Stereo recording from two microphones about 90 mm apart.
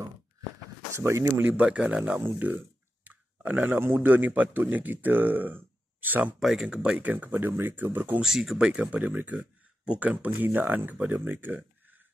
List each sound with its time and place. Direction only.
0.9 s speech: 35° right (ahead or behind)
1.4 s speech: 20° right (ahead or behind)
6.4 s speech: 5° right (ahead or behind); by 8.2 s 20° right (ahead or behind)
8.2 s speech: centre (ahead or behind); by 12.0 s 20° right (ahead or behind)